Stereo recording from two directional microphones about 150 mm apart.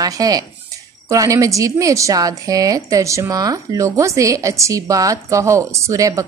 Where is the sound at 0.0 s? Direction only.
25° right (ahead or behind).